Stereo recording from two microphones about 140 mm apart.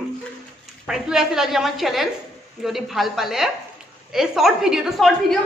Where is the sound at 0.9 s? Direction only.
5° right (ahead or behind).